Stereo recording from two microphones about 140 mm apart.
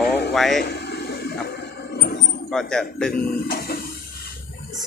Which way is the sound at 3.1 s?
90° left.